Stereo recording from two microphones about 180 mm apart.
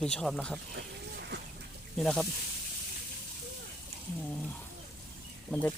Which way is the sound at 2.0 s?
5° left (ahead or behind).